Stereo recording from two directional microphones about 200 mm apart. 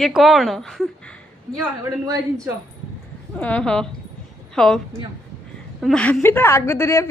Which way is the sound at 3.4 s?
5° left (ahead or behind).